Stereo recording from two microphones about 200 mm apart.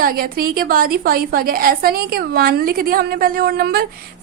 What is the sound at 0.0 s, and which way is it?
A woman's voice, 45° right (ahead or behind).